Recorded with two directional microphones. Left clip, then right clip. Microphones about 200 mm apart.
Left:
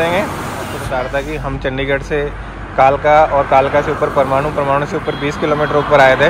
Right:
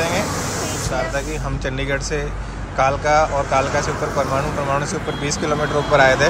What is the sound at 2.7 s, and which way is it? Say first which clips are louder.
Speech: left 7 dB; 5° right (ahead or behind).